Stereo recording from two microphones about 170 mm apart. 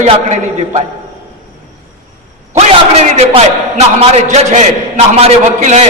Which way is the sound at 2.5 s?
40° right (ahead or behind).